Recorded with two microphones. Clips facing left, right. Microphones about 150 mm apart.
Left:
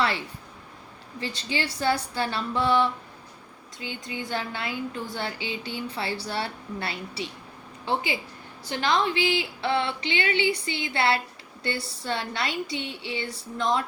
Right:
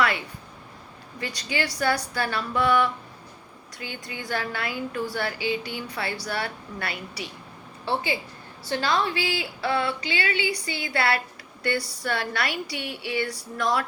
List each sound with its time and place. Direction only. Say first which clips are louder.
1.2 s a woman's voice: right 1 dB; 25° left (ahead or behind)